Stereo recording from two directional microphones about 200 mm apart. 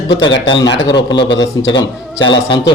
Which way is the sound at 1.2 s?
65° left (ahead or behind).